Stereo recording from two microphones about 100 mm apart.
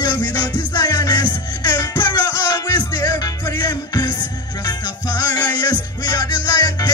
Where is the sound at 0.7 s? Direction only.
45° left (ahead or behind).